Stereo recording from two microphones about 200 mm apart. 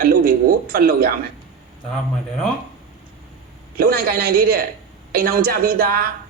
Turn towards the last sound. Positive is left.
turn(degrees=-45)  # may be behind; listen again after turning